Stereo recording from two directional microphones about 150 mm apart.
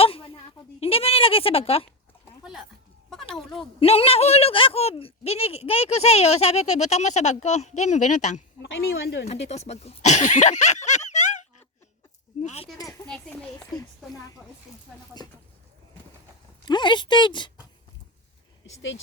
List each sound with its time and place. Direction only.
0.0 s a sound: 40° left (ahead or behind)
2.4 s a sound: centre (ahead or behind)
3.8 s a woman's voice: 40° left (ahead or behind)
12.7 s speech: 25° left (ahead or behind)
13.1 s speech: 10° left (ahead or behind)
16.6 s speech: 30° left (ahead or behind)